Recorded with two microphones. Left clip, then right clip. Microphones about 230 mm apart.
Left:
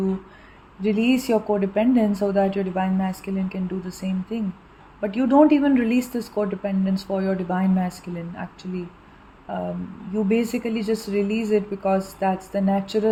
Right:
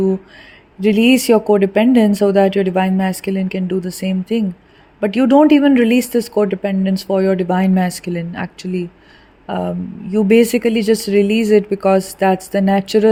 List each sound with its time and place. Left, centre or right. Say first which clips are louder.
0.8 s speech: right 9 dB; right